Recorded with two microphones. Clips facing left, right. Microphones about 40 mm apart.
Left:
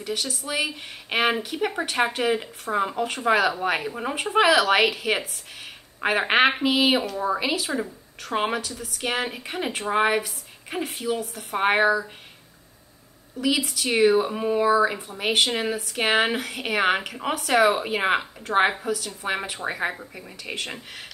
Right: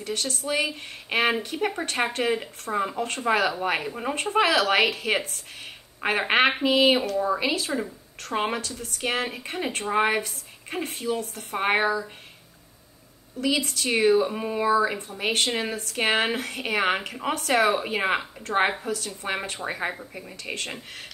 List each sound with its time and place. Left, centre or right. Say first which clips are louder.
0.0 s speech: even; centre
7.2 s a woman's voice: right 1 dB; centre
7.4 s a woman's voice: even; centre
13.4 s a woman's voice: left 1 dB; centre